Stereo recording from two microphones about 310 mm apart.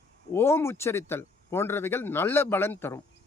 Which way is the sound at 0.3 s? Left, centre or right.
Centre.